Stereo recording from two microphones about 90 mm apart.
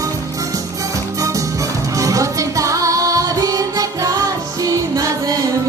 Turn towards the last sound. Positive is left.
turn(degrees=-40)  # may be behind; listen again after turning